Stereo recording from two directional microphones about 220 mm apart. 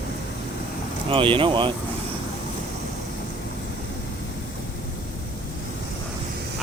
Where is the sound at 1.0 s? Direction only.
25° right (ahead or behind).